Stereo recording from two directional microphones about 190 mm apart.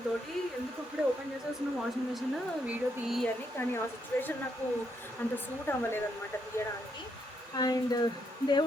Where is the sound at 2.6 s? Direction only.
Centre (ahead or behind).